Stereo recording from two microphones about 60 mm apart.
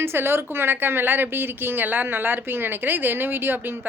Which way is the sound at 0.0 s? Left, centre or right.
Right.